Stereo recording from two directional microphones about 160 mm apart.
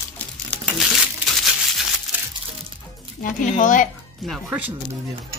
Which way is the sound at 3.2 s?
55° left (ahead or behind).